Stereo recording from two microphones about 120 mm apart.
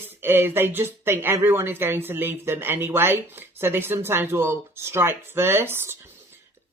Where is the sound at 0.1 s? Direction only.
20° right (ahead or behind).